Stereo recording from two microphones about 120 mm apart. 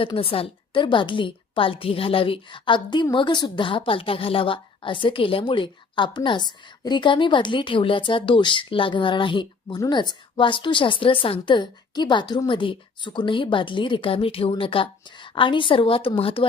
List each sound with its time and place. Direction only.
0.0 s a woman's voice: 50° left (ahead or behind)